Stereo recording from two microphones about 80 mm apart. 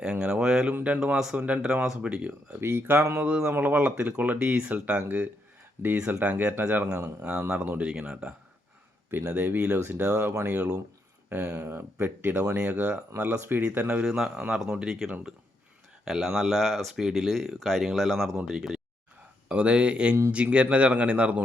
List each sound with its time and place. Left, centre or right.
0.0 s a sound: centre
0.7 s a sound: right
0.9 s speech: centre
2.6 s speech: right
3.2 s speech: centre
3.5 s speech: right
5.8 s speech: right
6.2 s speech: centre
10.4 s speech: centre
14.0 s speech: centre